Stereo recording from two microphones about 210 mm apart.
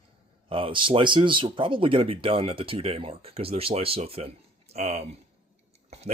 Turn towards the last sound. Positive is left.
turn(degrees=-30)  # may be behind; listen again after turning